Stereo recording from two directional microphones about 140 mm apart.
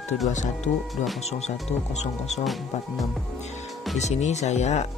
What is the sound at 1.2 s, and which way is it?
Speech, 50° left (ahead or behind).